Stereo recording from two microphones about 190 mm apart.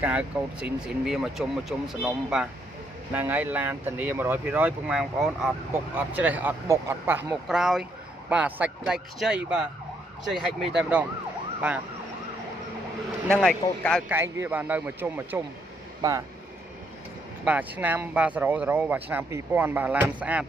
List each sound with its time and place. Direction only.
0.0 s speech: 5° right (ahead or behind)
13.3 s speech: 5° left (ahead or behind)
14.0 s speech: 15° right (ahead or behind)
17.5 s speech: 10° right (ahead or behind)